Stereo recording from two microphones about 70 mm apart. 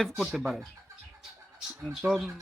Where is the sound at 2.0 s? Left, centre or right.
Right.